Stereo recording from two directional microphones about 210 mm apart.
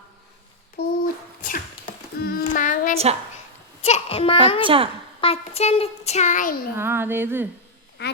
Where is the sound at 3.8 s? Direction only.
30° left (ahead or behind).